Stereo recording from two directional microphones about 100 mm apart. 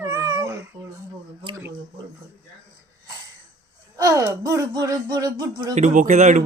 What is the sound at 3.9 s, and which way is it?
Speech, 35° right (ahead or behind).